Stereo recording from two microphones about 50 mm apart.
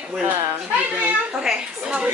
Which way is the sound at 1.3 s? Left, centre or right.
Centre.